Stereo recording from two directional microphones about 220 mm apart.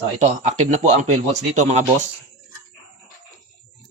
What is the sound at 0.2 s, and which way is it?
Speech, 30° right (ahead or behind).